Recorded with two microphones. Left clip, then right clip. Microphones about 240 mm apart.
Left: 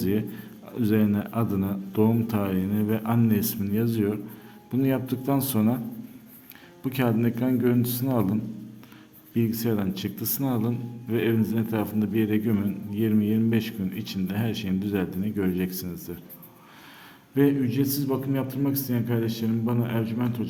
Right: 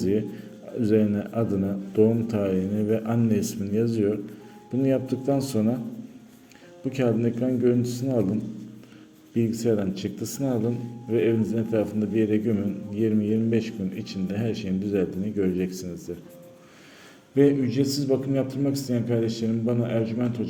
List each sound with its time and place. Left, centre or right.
0.0 s a man's voice: centre
6.9 s a man's voice: left
17.3 s a man's voice: centre